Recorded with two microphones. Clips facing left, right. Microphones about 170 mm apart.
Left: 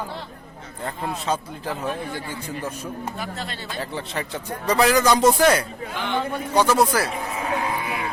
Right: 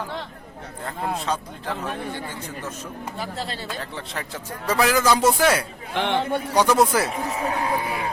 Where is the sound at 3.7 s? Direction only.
Centre (ahead or behind).